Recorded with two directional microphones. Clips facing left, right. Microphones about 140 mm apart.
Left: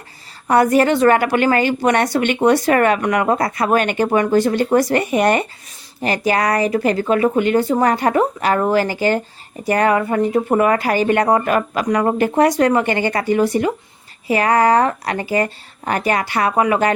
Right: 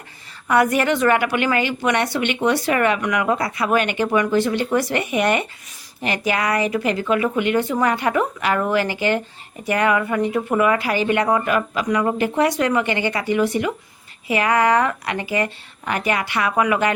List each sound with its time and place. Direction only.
0.4 s a woman's voice: 35° left (ahead or behind)